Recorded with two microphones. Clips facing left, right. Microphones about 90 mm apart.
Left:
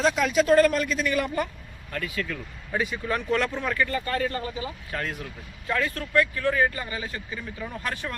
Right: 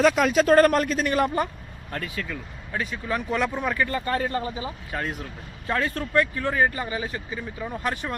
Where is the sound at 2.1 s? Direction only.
10° right (ahead or behind).